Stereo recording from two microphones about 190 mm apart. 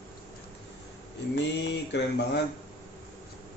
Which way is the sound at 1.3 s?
65° left (ahead or behind).